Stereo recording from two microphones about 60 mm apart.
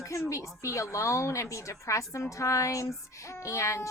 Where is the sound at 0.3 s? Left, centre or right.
Left.